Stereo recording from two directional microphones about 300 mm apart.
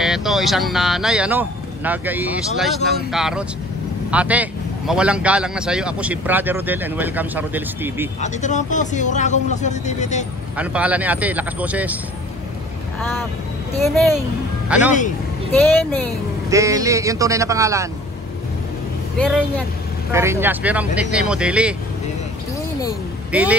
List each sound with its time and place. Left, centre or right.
0.0 s a man's voice: centre
8.2 s speech: left
10.5 s a man's voice: centre
13.7 s speech: centre
14.7 s a man's voice: centre
16.4 s a man's voice: centre
19.2 s a man's voice: centre
20.1 s a man's voice: centre
23.3 s a man's voice: centre